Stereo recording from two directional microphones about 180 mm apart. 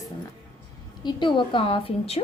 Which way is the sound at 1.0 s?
25° left (ahead or behind).